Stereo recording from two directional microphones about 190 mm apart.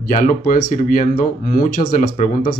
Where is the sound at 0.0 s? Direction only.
45° left (ahead or behind).